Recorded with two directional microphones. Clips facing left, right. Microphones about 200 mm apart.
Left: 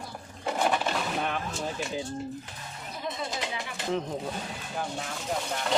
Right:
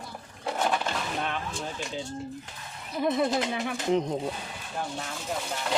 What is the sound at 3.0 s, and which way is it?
Speech, 55° right (ahead or behind).